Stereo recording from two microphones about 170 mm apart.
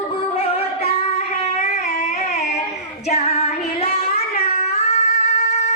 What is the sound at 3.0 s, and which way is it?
Child singing, 40° left (ahead or behind).